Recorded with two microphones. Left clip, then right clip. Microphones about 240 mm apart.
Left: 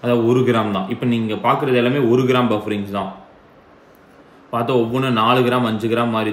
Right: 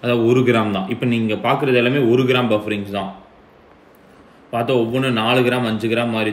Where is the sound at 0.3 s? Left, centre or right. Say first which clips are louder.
Right 1 dB; left.